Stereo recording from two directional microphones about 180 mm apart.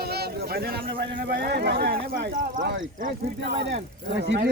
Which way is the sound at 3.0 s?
60° right (ahead or behind).